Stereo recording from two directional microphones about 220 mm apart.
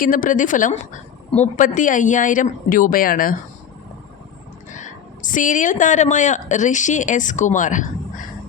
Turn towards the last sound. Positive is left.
turn(degrees=35)  # may be behind; listen again after turning